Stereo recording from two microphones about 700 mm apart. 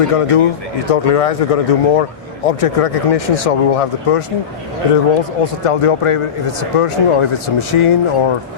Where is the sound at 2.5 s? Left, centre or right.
Left.